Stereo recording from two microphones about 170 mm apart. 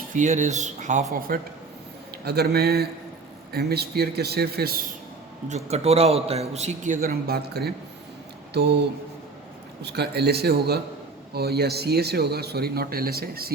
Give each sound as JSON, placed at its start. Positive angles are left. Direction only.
{"t": 0.1, "sound": "speech", "side_deg": -45}
{"t": 2.2, "sound": "a man's voice", "side_deg": -70}
{"t": 5.5, "sound": "a man's voice", "side_deg": -40}
{"t": 9.8, "sound": "a man's voice", "side_deg": -70}